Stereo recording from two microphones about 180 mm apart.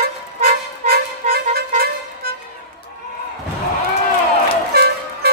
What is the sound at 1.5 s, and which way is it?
Vehicle horn, 60° right (ahead or behind).